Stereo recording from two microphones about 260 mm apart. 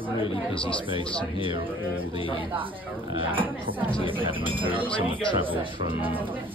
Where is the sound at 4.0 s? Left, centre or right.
Centre.